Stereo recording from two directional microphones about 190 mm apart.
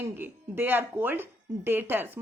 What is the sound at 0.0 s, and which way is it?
A woman's voice, 10° right (ahead or behind).